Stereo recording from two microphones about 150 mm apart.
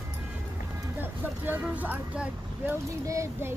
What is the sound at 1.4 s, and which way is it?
Speech, 10° right (ahead or behind).